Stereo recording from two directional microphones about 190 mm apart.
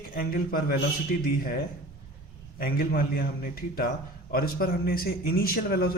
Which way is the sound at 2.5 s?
50° left (ahead or behind).